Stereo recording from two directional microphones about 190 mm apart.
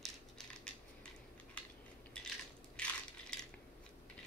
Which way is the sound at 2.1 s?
5° left (ahead or behind).